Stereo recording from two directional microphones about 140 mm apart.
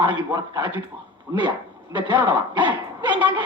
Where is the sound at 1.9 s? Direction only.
30° right (ahead or behind).